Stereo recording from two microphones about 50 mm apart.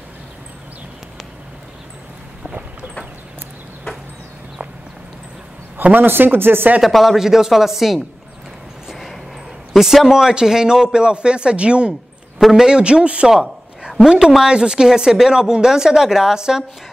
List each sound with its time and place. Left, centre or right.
5.9 s speech: right
6.8 s speech: centre
8.9 s a sound: centre
9.8 s a man's voice: centre
13.3 s speech: centre